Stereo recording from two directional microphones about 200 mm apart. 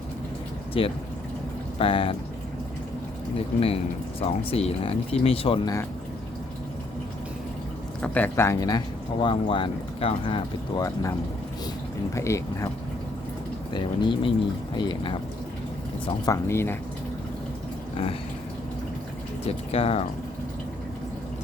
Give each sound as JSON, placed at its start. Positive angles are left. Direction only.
{"t": 0.7, "sound": "speech", "side_deg": 30}
{"t": 3.3, "sound": "speech", "side_deg": 30}
{"t": 8.0, "sound": "speech", "side_deg": 10}
{"t": 12.1, "sound": "speech", "side_deg": 15}
{"t": 13.7, "sound": "speech", "side_deg": 25}
{"t": 16.2, "sound": "speech", "side_deg": 15}
{"t": 17.9, "sound": "a sound", "side_deg": 30}
{"t": 19.5, "sound": "speech", "side_deg": 30}